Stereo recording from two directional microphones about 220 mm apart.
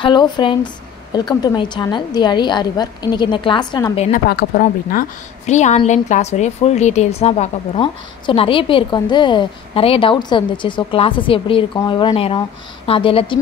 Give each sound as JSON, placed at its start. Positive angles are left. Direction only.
{"t": 0.0, "sound": "a woman's voice", "side_deg": 20}
{"t": 4.3, "sound": "speech", "side_deg": 45}
{"t": 5.5, "sound": "a woman's voice", "side_deg": 30}